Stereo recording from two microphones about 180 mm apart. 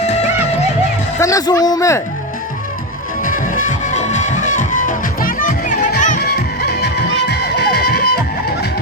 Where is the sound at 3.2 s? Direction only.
50° left (ahead or behind).